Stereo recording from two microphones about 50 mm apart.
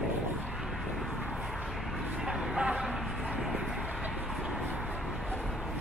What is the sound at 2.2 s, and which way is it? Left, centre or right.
Vehicle, centre.